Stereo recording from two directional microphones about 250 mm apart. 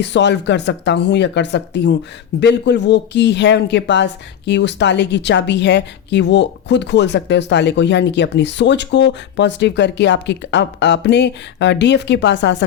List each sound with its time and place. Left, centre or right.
0.0 s speech: left